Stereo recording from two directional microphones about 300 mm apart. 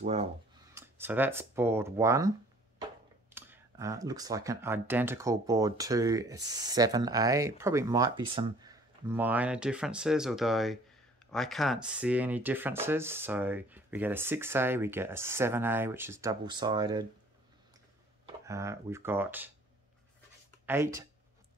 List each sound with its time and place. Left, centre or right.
0.0 s speech: right
0.7 s speech: centre
3.3 s speech: centre
18.2 s speech: centre
20.6 s speech: centre